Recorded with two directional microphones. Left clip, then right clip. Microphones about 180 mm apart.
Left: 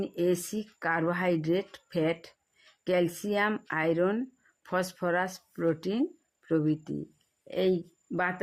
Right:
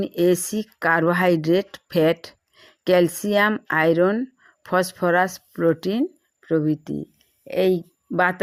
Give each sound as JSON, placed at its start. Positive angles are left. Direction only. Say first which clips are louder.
{"t": 0.0, "sound": "speech", "louder": "right 9 dB", "side_deg": -25}